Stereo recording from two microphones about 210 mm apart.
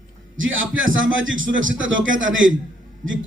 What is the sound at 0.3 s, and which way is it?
A man's voice, 65° right (ahead or behind).